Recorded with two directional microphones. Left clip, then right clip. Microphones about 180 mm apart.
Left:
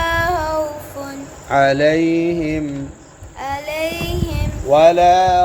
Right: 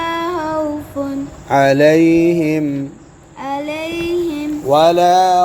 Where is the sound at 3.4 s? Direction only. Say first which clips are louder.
Even; 45° left (ahead or behind).